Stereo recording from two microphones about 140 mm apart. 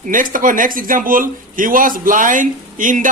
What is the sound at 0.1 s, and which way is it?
Speech, 75° right (ahead or behind).